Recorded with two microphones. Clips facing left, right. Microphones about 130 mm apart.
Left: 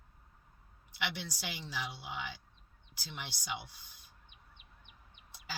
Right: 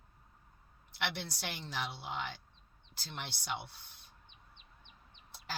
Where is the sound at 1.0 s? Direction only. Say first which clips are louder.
Right 1 dB; 60° right (ahead or behind).